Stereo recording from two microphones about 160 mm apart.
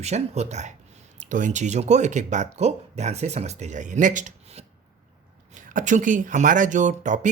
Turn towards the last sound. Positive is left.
turn(degrees=-50)  # may be behind; listen again after turning